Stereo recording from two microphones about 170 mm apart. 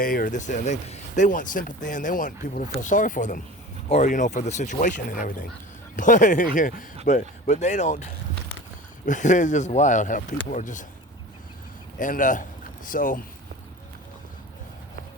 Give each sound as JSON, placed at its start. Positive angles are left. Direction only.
{"t": 0.0, "sound": "speech", "side_deg": 55}
{"t": 11.9, "sound": "speech", "side_deg": 50}